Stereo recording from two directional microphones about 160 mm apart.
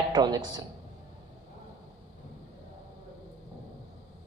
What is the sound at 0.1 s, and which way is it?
Speech, 25° right (ahead or behind).